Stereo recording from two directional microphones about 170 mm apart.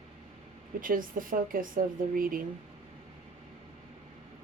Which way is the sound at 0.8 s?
55° right (ahead or behind).